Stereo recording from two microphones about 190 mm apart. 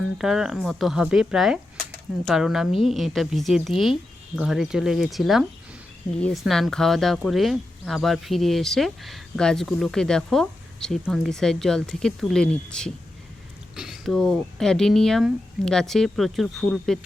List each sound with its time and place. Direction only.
0.2 s speech: centre (ahead or behind)